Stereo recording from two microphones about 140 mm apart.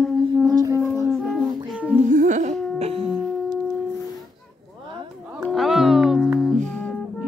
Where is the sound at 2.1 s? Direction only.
65° right (ahead or behind).